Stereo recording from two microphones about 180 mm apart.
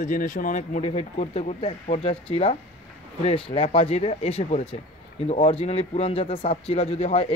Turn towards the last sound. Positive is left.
turn(degrees=35)  # may be behind; listen again after turning